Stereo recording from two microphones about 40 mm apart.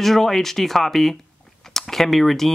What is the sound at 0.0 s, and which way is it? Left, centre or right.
Speech, centre.